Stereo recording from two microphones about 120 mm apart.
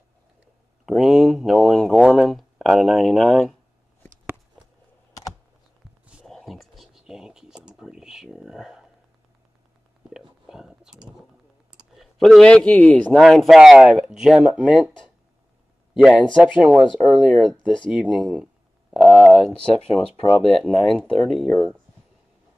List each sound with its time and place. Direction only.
0.8 s a sound: centre (ahead or behind)
6.2 s a sound: centre (ahead or behind)
10.0 s whispering: 5° right (ahead or behind)
12.0 s a man's voice: 5° left (ahead or behind)
13.2 s speech: centre (ahead or behind)
15.9 s speech: 5° right (ahead or behind)
17.9 s a sound: 5° right (ahead or behind)
19.7 s speech: 60° left (ahead or behind)
20.6 s speech: centre (ahead or behind)